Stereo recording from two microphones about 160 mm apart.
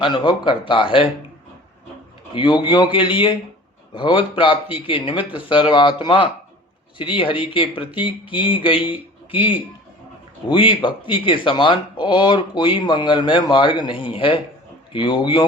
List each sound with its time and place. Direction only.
0.0 s speech: 30° left (ahead or behind)
2.3 s speech: 30° left (ahead or behind)